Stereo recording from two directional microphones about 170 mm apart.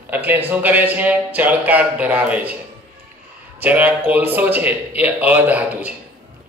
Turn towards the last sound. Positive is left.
turn(degrees=-10)  # may be behind; listen again after turning